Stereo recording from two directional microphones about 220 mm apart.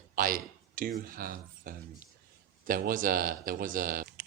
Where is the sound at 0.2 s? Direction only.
40° right (ahead or behind).